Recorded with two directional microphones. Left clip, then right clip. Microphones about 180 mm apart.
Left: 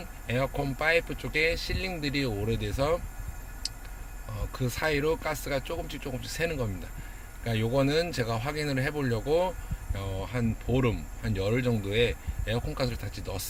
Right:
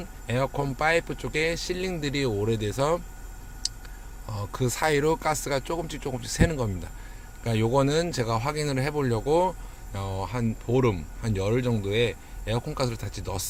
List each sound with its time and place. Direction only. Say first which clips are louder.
0.3 s speech: right 2 dB; 25° right (ahead or behind)
3.6 s a sound: right 5 dB; 30° right (ahead or behind)
4.3 s speech: right 6 dB; 35° right (ahead or behind)